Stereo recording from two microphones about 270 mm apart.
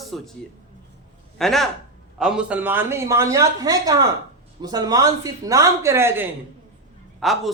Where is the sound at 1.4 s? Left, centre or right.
Centre.